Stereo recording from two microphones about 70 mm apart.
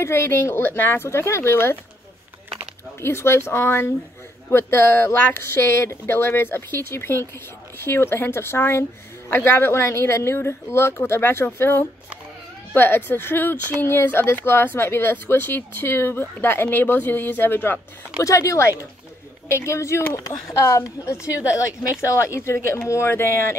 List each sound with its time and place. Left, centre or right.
0.0 s speech: left
3.0 s speech: left
18.1 s speech: left
21.3 s speech: right
22.0 s speech: left